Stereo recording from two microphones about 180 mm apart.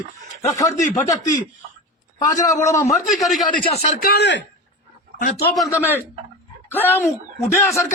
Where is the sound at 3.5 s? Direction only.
30° left (ahead or behind).